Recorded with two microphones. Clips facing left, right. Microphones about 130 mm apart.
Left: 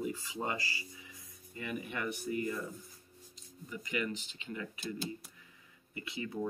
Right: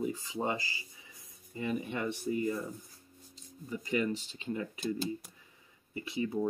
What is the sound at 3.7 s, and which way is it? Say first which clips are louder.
Speech: right 5 dB; 30° right (ahead or behind).